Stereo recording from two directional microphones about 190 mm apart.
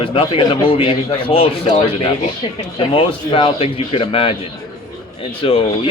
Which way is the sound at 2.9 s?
30° left (ahead or behind).